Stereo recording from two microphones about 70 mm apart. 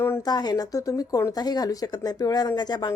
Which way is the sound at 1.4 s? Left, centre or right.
Left.